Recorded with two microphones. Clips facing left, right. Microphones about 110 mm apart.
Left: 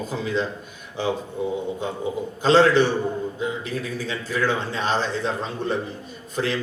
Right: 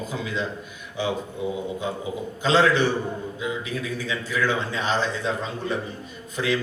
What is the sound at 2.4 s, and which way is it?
Speech, 30° left (ahead or behind).